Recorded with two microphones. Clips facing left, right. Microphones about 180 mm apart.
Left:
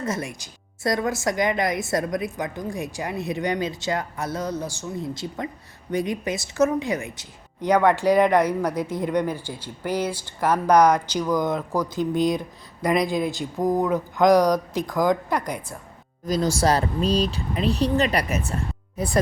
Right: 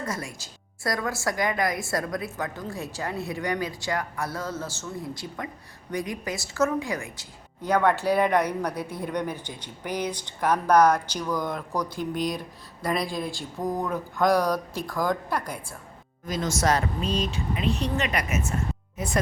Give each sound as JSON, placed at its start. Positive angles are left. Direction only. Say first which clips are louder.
{"t": 0.0, "sound": "a woman's voice", "louder": "left 5 dB", "side_deg": 20}
{"t": 16.2, "sound": "speech", "louder": "left 4 dB", "side_deg": 35}